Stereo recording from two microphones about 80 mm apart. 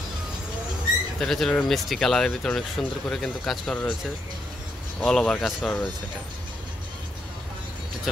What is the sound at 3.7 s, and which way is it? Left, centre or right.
Speech, centre.